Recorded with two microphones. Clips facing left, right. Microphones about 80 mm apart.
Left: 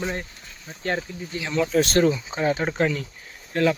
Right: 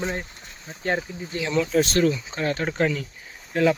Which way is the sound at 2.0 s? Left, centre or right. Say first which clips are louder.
Left 1 dB; centre.